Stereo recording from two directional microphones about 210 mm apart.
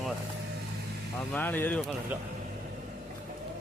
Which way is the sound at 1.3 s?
10° left (ahead or behind).